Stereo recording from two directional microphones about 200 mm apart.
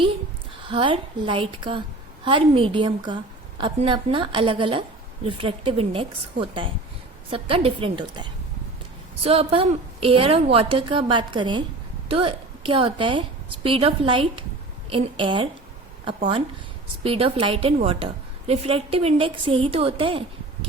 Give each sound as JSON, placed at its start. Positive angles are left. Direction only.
{"t": 0.7, "sound": "a woman's voice", "side_deg": -25}